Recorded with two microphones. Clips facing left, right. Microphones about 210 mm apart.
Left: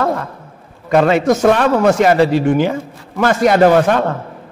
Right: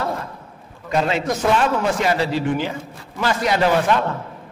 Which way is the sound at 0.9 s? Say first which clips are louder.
Left 9 dB; 55° left (ahead or behind).